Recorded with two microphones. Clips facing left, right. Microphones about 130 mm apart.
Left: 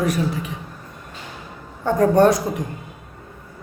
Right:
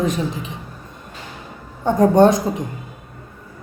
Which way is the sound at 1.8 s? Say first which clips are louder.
Right 2 dB; 20° right (ahead or behind).